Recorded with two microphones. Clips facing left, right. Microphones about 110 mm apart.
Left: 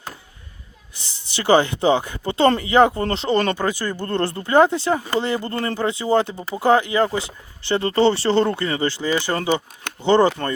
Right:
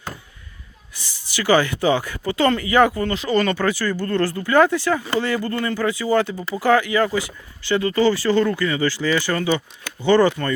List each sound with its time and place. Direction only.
0.9 s speech: 25° left (ahead or behind)